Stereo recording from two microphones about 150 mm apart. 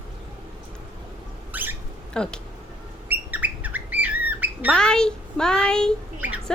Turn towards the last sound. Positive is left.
turn(degrees=-10)  # may be behind; listen again after turning